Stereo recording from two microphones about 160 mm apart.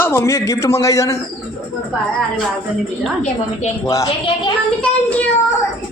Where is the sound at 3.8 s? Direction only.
20° left (ahead or behind).